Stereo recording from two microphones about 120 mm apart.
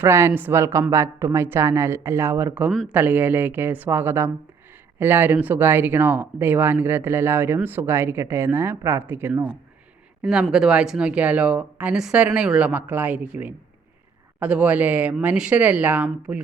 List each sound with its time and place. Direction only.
0.0 s a woman's voice: 20° right (ahead or behind)
10.5 s speech: 5° right (ahead or behind)